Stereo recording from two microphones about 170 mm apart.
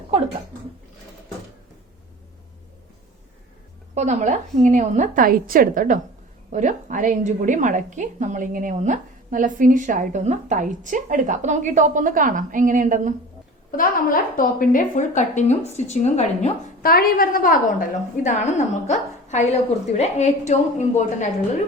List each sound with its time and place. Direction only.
3.9 s a woman's voice: 45° right (ahead or behind)
13.7 s a woman's voice: 55° left (ahead or behind)
16.8 s a woman's voice: 60° left (ahead or behind); by 21.2 s 45° left (ahead or behind)